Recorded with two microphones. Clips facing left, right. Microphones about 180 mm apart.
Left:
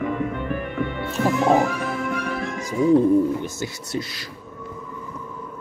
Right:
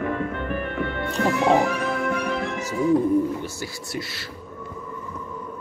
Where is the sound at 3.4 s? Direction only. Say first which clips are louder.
Left 2 dB; 20° left (ahead or behind).